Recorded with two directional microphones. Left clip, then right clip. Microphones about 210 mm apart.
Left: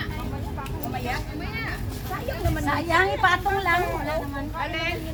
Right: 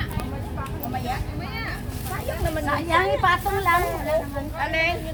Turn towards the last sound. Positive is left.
turn(degrees=-55)  # may be behind; listen again after turning